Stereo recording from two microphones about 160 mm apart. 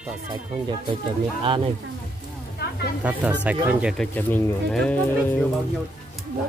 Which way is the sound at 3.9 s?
10° left (ahead or behind).